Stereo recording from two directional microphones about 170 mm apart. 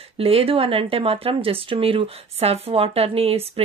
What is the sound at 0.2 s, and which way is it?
Speech, 35° right (ahead or behind).